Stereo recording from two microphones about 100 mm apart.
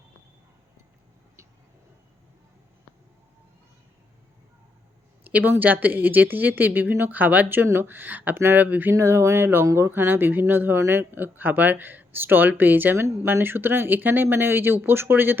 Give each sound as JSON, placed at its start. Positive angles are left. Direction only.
{"t": 5.2, "sound": "speech", "side_deg": -15}
{"t": 9.0, "sound": "speech", "side_deg": -30}